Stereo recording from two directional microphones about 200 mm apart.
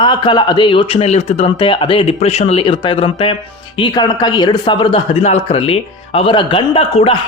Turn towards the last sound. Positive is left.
turn(degrees=30)  # may be behind; listen again after turning